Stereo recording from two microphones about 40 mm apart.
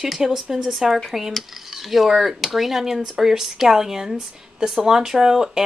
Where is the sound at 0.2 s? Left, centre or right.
Centre.